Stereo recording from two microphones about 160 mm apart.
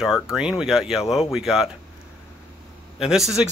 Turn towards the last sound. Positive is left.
turn(degrees=-5)  # may be behind; listen again after turning